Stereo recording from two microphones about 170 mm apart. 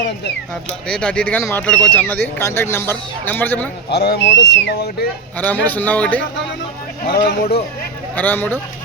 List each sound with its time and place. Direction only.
0.9 s speech: 5° left (ahead or behind)
3.9 s speech: 75° left (ahead or behind)
5.6 s speech: 10° left (ahead or behind)
7.1 s speech: 70° left (ahead or behind)
8.1 s speech: 10° left (ahead or behind)